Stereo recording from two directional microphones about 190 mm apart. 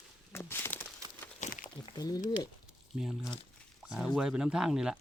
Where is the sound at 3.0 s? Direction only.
5° right (ahead or behind).